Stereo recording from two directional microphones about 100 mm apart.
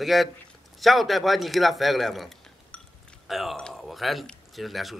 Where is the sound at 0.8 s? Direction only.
Centre (ahead or behind).